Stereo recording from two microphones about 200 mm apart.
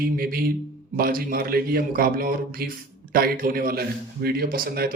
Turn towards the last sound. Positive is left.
turn(degrees=-50)  # may be behind; listen again after turning